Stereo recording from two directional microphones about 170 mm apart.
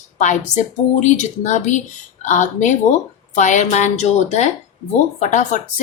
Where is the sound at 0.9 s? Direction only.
45° left (ahead or behind).